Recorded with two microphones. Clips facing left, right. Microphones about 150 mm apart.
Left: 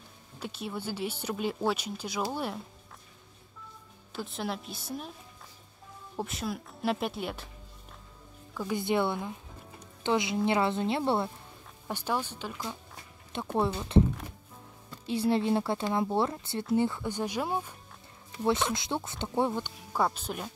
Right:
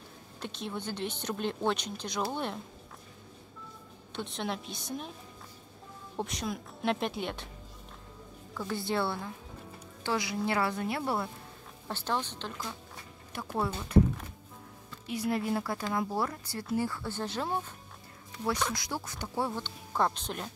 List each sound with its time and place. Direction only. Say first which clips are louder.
0.4 s speech: left 1 dB; 5° left (ahead or behind)
4.1 s speech: left 1 dB; 5° left (ahead or behind)
6.1 s speech: left 1 dB; centre (ahead or behind)
8.5 s speech: left 3 dB; 15° left (ahead or behind)
11.9 s speech: left 1 dB; 10° left (ahead or behind)
13.3 s speech: left 4 dB; 25° left (ahead or behind)
15.0 s speech: left 4 dB; 30° left (ahead or behind); by 17.7 s 10° left (ahead or behind)
18.4 s speech: left 4 dB; 25° left (ahead or behind); by 20.5 s 5° left (ahead or behind)